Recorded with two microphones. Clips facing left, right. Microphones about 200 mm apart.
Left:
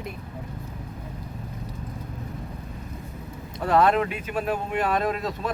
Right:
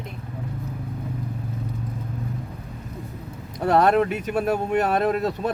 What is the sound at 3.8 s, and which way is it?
Speech, 45° right (ahead or behind).